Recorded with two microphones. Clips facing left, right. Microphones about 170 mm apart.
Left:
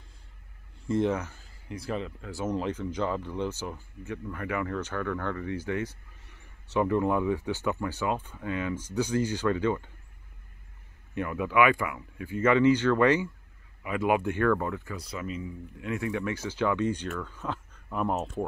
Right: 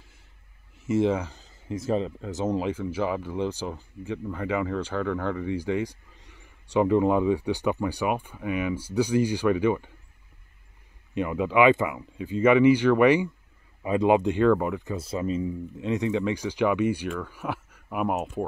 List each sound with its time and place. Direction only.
0.9 s speech: 10° right (ahead or behind); by 2.3 s 30° right (ahead or behind)
2.5 s speech: 10° right (ahead or behind)
11.1 s speech: 20° right (ahead or behind)